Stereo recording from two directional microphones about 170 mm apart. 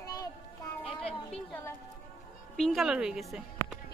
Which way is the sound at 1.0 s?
10° left (ahead or behind).